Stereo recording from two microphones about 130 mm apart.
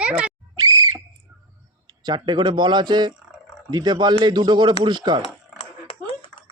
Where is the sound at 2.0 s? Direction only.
35° right (ahead or behind).